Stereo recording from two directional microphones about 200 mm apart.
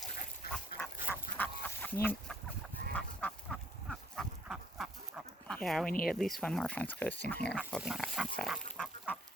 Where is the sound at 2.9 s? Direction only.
5° left (ahead or behind).